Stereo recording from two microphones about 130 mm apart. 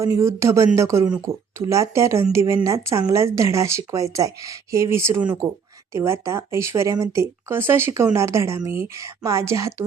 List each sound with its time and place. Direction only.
0.0 s speech: 20° right (ahead or behind)